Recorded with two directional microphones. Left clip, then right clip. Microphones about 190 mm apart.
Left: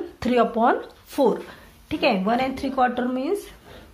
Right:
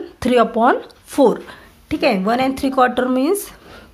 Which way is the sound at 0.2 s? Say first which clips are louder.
Right 6 dB; 25° right (ahead or behind).